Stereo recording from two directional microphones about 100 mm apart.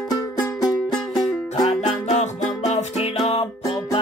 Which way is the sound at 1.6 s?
90° left.